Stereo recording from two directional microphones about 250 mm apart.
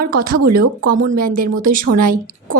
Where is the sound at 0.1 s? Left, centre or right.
Right.